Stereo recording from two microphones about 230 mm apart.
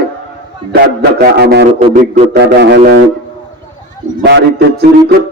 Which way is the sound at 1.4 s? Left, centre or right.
Right.